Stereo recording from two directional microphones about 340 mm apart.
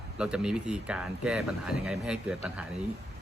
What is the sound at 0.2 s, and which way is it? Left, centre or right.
Speech, centre.